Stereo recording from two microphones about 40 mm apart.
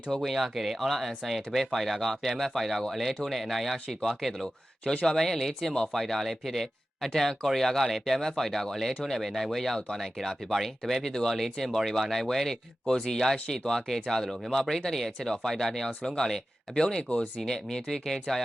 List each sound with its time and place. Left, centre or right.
0.1 s speech: centre
0.3 s speech: centre
14.6 s speech: centre
17.4 s speech: centre